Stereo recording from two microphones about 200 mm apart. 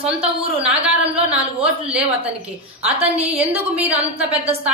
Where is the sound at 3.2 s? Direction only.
10° right (ahead or behind).